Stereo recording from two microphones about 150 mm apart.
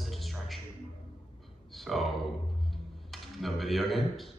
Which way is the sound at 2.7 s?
Centre (ahead or behind).